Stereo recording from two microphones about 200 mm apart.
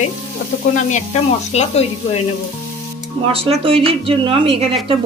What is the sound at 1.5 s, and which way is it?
Sizzle, 30° left (ahead or behind).